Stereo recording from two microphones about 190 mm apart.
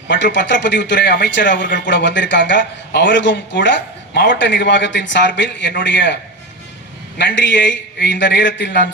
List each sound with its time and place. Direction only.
0.1 s a man's voice: 70° left (ahead or behind)
7.2 s a man's voice: 70° left (ahead or behind)